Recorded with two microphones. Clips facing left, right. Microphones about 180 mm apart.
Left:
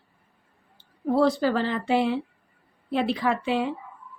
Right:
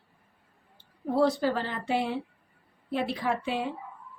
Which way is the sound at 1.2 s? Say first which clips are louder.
Left 3 dB; 90° left.